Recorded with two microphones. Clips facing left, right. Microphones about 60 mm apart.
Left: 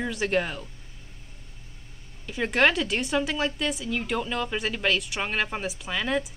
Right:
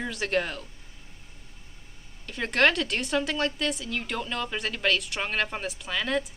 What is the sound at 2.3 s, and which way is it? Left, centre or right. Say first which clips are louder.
A woman's voice: left 1 dB; centre.